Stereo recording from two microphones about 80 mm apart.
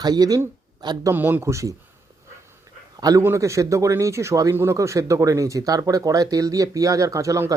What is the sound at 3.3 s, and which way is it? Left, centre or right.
Speech, right.